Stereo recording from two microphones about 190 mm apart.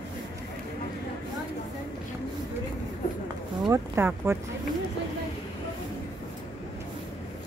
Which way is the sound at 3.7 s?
10° right (ahead or behind).